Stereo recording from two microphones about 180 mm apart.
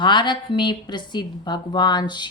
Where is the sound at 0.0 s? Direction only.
25° left (ahead or behind).